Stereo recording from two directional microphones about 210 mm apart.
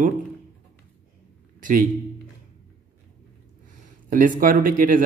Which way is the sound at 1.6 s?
40° right (ahead or behind).